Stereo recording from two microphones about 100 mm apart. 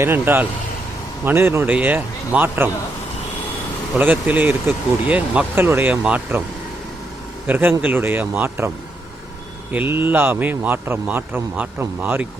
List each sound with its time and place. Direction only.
0.0 s speech: 20° right (ahead or behind)
3.9 s speech: 20° right (ahead or behind)
7.4 s speech: 20° right (ahead or behind)
9.7 s speech: 20° right (ahead or behind)